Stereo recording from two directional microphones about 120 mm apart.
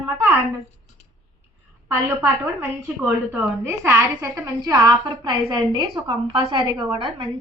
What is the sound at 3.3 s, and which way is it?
A woman's voice, 20° right (ahead or behind).